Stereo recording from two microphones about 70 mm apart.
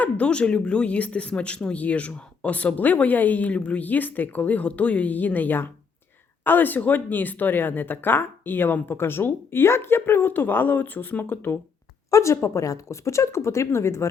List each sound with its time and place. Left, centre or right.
0.0 s speech: centre
12.1 s speech: left